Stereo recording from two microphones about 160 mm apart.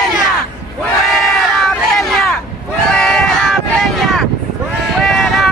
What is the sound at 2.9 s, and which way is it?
Vehicle, 5° left (ahead or behind).